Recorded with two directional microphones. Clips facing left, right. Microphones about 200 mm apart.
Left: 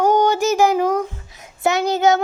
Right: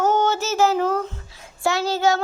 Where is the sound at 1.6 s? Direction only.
20° left (ahead or behind).